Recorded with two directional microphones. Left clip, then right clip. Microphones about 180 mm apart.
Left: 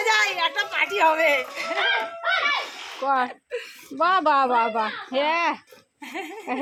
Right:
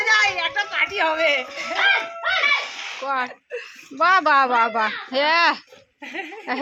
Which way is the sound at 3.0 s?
45° left (ahead or behind).